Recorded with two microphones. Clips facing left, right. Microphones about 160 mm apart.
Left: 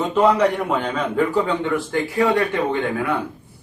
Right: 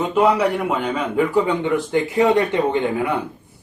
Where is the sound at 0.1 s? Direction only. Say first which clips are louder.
Left 1 dB; 10° right (ahead or behind).